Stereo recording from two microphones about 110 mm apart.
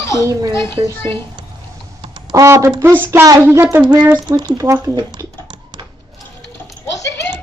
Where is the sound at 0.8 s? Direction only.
50° right (ahead or behind).